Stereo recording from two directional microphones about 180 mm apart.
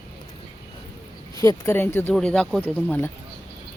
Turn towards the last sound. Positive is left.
turn(degrees=10)  # may be behind; listen again after turning